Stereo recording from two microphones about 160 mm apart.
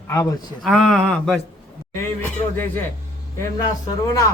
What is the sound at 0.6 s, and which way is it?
Speech, centre (ahead or behind).